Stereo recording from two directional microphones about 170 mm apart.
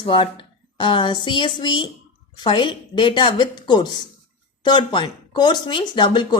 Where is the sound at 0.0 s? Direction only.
30° left (ahead or behind).